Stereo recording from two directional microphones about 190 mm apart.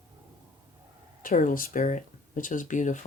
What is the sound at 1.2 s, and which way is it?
Speech, 45° left (ahead or behind).